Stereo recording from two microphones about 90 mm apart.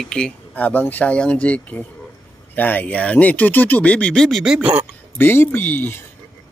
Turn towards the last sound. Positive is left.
turn(degrees=25)  # may be behind; listen again after turning